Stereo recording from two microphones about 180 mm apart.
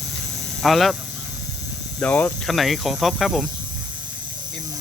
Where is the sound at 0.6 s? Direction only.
Centre (ahead or behind).